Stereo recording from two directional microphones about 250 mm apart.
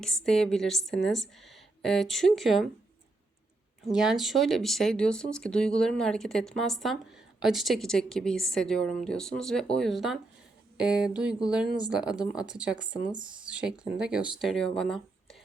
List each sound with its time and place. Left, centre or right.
0.0 s speech: centre
3.9 s speech: centre